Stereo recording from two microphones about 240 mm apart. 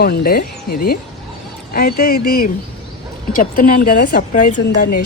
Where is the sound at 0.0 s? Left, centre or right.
Left.